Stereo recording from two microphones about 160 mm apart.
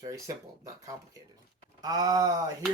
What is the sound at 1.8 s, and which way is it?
Speech, 25° right (ahead or behind).